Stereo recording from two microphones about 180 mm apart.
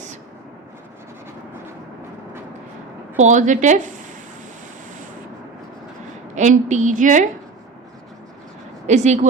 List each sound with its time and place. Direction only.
3.2 s a woman's voice: 40° right (ahead or behind)
6.3 s a woman's voice: 40° right (ahead or behind)
8.9 s speech: 40° right (ahead or behind)